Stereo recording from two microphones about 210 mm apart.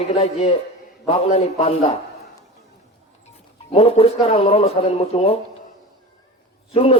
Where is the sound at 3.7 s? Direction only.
30° left (ahead or behind).